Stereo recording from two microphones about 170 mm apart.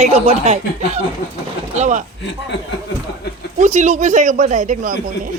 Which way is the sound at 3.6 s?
45° right (ahead or behind).